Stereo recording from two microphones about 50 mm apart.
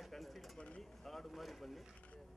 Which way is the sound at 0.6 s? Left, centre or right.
Left.